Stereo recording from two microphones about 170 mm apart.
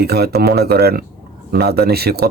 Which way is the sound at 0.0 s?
70° right (ahead or behind).